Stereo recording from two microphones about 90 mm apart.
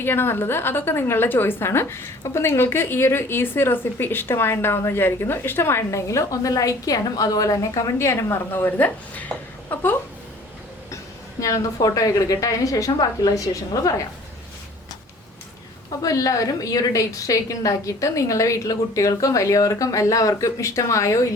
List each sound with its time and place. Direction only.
0.0 s a woman's voice: 25° left (ahead or behind)
11.3 s a woman's voice: 35° left (ahead or behind)
16.0 s a woman's voice: 40° left (ahead or behind)